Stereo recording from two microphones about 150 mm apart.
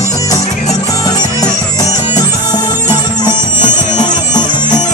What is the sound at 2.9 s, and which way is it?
Music, 30° left (ahead or behind).